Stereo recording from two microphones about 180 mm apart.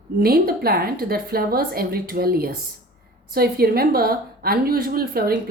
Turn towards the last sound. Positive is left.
turn(degrees=-55)  # may be behind; listen again after turning